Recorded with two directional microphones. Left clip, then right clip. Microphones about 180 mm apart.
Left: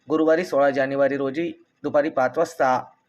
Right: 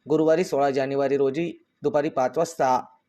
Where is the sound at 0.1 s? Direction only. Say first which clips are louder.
Left 1 dB; 35° right (ahead or behind).